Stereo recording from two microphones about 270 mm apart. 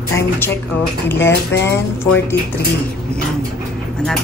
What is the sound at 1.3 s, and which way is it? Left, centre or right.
Speech, left.